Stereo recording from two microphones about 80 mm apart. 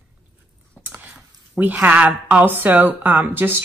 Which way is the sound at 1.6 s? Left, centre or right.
Right.